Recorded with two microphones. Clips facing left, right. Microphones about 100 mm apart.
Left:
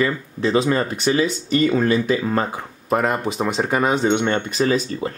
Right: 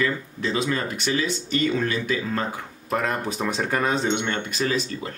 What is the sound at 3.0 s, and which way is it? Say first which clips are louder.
Speech: left 5 dB; 15° left (ahead or behind).